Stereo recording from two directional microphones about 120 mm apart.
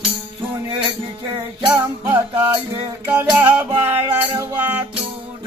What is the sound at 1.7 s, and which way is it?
Music, 20° right (ahead or behind).